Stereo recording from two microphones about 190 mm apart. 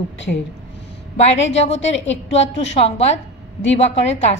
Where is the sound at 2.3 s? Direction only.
35° left (ahead or behind).